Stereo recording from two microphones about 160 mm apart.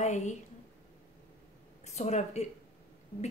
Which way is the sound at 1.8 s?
45° left (ahead or behind).